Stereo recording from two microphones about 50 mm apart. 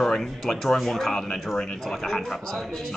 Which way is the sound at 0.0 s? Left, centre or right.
Centre.